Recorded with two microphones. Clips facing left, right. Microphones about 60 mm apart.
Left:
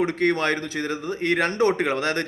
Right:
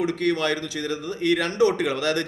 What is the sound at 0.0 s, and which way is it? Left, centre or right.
A man's voice, left.